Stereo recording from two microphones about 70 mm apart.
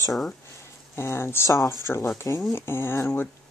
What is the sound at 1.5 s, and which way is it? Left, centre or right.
Speech, left.